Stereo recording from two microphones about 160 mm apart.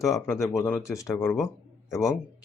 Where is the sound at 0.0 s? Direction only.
20° left (ahead or behind).